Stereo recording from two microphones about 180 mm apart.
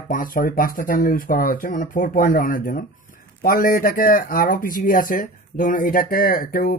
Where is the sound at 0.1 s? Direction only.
50° left (ahead or behind).